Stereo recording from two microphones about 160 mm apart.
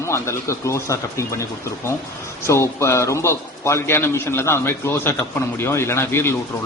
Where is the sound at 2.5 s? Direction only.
15° left (ahead or behind).